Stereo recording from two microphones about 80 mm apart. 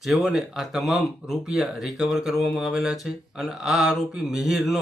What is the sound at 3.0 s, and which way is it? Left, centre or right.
Speech, centre.